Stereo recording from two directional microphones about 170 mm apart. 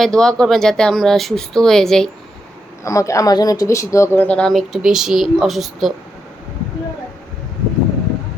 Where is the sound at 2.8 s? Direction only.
20° left (ahead or behind); by 5.9 s centre (ahead or behind).